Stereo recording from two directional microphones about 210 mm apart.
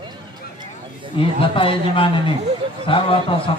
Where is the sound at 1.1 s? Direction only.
25° left (ahead or behind).